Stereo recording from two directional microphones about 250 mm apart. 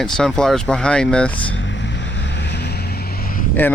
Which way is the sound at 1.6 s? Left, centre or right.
Left.